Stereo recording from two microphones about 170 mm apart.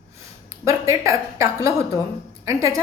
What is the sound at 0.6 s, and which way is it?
A woman's voice, 20° right (ahead or behind).